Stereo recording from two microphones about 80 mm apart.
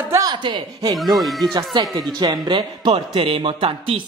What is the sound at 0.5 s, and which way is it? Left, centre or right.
Speech, right.